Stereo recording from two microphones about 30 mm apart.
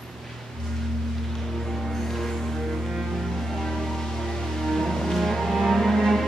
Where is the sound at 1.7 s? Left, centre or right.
Centre.